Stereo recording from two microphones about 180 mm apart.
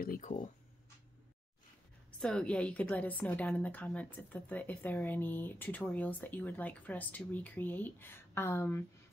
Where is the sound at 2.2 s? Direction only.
5° left (ahead or behind).